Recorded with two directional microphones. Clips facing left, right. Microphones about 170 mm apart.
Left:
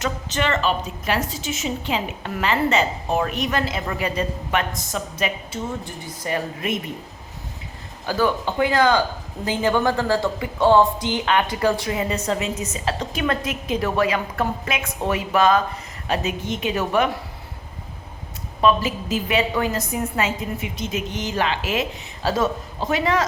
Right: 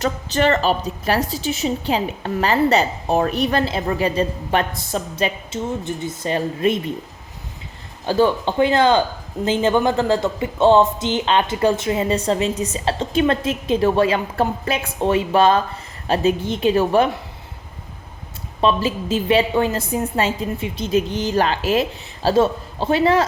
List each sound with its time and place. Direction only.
0.0 s a woman's voice: 35° right (ahead or behind)
8.0 s a woman's voice: 25° right (ahead or behind)
18.6 s a woman's voice: 30° right (ahead or behind)